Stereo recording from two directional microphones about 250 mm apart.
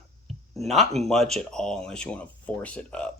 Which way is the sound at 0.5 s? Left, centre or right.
Centre.